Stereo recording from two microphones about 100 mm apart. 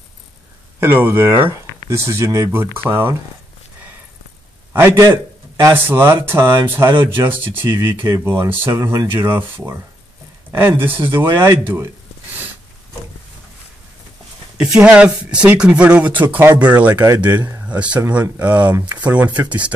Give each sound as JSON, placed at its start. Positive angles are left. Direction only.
{"t": 0.7, "sound": "speech", "side_deg": -20}
{"t": 5.0, "sound": "speech", "side_deg": -30}
{"t": 14.6, "sound": "speech", "side_deg": -10}